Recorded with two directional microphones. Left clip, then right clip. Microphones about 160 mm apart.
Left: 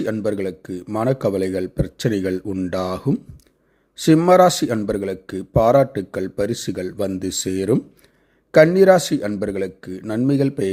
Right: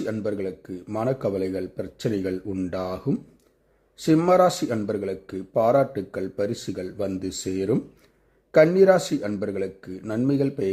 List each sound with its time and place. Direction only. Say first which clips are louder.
0.0 s speech: left 5 dB; 35° left (ahead or behind)